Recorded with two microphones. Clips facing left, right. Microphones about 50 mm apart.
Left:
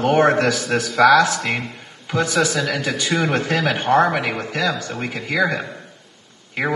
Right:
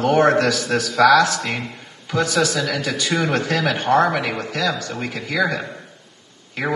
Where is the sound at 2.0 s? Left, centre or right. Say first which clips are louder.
Even; centre.